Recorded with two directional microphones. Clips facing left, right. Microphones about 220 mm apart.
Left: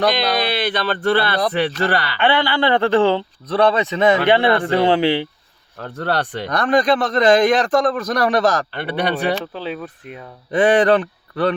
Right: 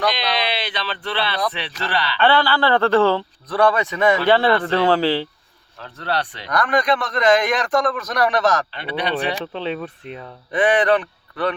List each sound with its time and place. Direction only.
0.0 s a sound: 45° left (ahead or behind)
1.5 s speech: 50° left (ahead or behind)
2.1 s speech: 15° left (ahead or behind)
5.8 s speech: 50° left (ahead or behind)
6.5 s a man's voice: 30° left (ahead or behind)
8.7 s speech: 50° left (ahead or behind)
9.4 s speech: 5° left (ahead or behind)
10.5 s a man's voice: 30° left (ahead or behind)